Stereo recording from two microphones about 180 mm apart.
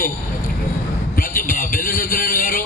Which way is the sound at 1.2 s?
50° left (ahead or behind).